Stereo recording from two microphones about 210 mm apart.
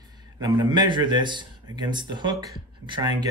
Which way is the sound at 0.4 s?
20° right (ahead or behind).